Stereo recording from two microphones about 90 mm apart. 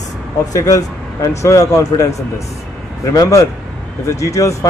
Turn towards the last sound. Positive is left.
turn(degrees=35)  # may be behind; listen again after turning